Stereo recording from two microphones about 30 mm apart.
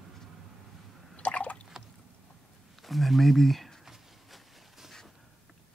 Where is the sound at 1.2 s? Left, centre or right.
Left.